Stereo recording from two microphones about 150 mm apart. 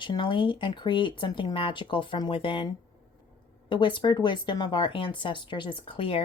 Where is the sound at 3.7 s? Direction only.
30° left (ahead or behind).